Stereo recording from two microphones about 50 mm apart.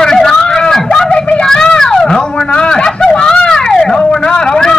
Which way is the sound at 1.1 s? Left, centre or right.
Left.